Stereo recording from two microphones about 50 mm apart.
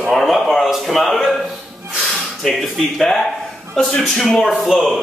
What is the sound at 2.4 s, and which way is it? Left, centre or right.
Speech, centre.